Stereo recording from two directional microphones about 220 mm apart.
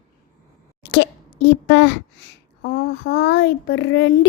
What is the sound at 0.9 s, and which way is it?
A child's voice, 50° left (ahead or behind).